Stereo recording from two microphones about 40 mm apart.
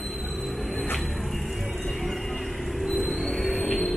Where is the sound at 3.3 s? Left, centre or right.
Left.